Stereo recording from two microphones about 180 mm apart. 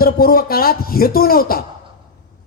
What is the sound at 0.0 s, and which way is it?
A man's voice, 55° left (ahead or behind).